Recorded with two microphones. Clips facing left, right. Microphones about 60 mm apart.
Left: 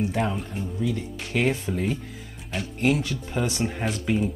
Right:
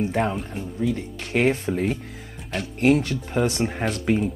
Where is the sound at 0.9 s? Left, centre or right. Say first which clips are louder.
Right 3 dB; right.